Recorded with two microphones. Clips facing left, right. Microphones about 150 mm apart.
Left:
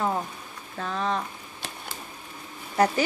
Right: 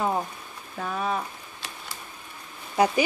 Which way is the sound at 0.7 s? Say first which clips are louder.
Even; 10° right (ahead or behind).